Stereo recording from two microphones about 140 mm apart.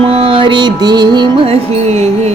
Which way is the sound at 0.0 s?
45° right (ahead or behind).